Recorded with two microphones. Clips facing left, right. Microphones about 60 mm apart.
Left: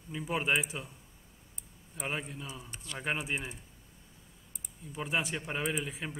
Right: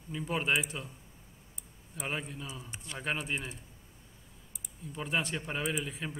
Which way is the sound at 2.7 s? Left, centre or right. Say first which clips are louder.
Even; right.